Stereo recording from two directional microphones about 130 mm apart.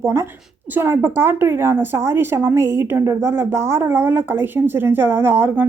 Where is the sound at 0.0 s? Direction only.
20° right (ahead or behind).